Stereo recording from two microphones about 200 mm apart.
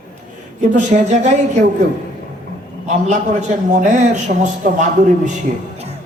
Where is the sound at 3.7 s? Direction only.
40° right (ahead or behind).